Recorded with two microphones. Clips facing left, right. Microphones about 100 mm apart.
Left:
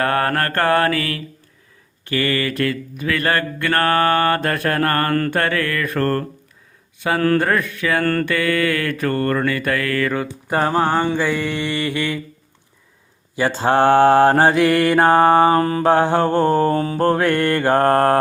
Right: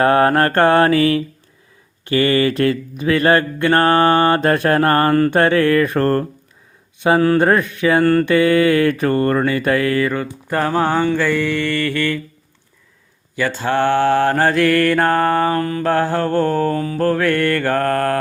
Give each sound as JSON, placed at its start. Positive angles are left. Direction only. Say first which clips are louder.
{"t": 0.0, "sound": "mantra", "louder": "right 6 dB", "side_deg": -20}
{"t": 7.2, "sound": "speech", "louder": "even", "side_deg": -15}
{"t": 7.4, "sound": "mantra", "louder": "right 5 dB", "side_deg": -25}
{"t": 10.2, "sound": "mantra", "louder": "even", "side_deg": 15}
{"t": 11.2, "sound": "mantra", "louder": "right 3 dB", "side_deg": 5}
{"t": 13.3, "sound": "mantra", "louder": "left 2 dB", "side_deg": 25}
{"t": 14.5, "sound": "mantra", "louder": "even", "side_deg": 15}